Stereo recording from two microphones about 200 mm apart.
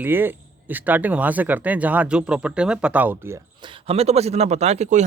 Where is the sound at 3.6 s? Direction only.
25° right (ahead or behind).